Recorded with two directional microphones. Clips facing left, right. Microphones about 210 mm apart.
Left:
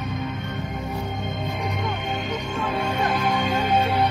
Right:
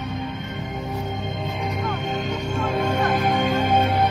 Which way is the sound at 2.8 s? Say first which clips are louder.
Right 3 dB; 45° right (ahead or behind).